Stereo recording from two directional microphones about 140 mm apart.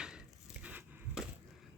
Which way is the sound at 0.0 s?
5° right (ahead or behind).